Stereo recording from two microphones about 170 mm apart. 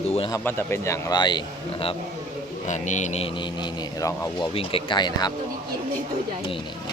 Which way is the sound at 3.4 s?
25° left (ahead or behind).